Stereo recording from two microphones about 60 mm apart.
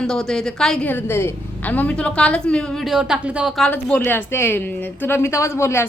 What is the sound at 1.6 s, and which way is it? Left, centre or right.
Speech, left.